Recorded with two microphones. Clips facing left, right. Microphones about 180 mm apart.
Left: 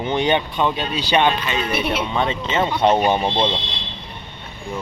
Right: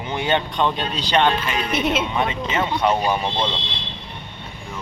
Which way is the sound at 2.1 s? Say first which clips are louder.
Left 2 dB; 30° left (ahead or behind).